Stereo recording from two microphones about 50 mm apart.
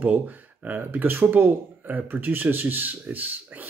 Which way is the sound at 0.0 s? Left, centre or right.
Right.